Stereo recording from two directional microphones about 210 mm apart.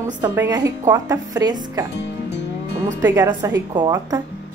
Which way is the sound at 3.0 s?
15° right (ahead or behind).